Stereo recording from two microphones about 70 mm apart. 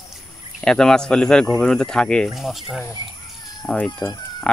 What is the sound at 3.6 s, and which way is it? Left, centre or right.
Speech, left.